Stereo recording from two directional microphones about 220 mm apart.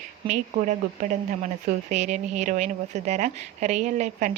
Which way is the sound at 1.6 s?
30° right (ahead or behind).